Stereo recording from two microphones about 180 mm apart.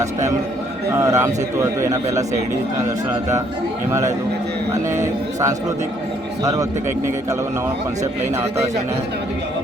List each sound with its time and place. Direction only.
0.9 s a man's voice: 15° right (ahead or behind)
6.4 s a man's voice: 20° right (ahead or behind)